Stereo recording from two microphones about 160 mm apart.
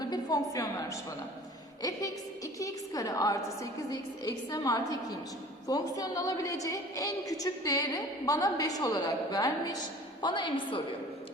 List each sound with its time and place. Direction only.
0.0 s a woman's voice: 25° left (ahead or behind)